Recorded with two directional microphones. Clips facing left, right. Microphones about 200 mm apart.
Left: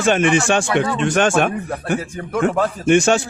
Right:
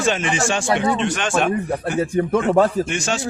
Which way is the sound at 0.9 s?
50° left (ahead or behind).